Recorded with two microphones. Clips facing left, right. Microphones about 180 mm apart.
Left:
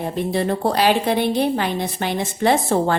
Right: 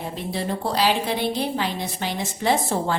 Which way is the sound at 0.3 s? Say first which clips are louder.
Left 5 dB; 55° left (ahead or behind).